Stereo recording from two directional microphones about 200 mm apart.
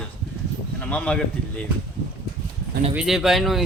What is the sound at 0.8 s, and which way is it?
Speech, 5° left (ahead or behind).